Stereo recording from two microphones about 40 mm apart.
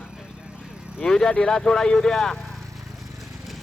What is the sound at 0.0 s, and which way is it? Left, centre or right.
Vehicle, centre.